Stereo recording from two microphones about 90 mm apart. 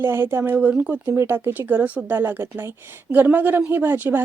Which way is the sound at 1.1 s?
30° right (ahead or behind).